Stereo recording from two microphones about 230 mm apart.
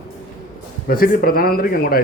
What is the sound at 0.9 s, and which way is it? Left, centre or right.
Speech, left.